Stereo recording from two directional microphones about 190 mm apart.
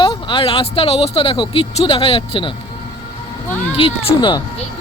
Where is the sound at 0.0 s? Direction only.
25° left (ahead or behind).